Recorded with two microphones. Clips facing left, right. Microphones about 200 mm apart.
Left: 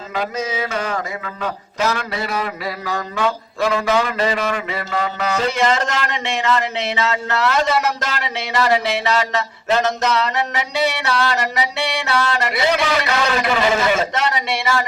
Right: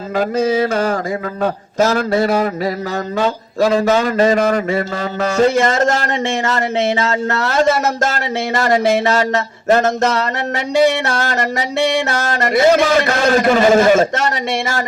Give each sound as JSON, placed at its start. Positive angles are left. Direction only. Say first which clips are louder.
{"t": 0.2, "sound": "speech", "louder": "right 8 dB", "side_deg": -50}